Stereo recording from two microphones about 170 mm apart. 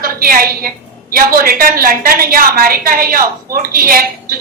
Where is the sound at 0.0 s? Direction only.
55° right (ahead or behind).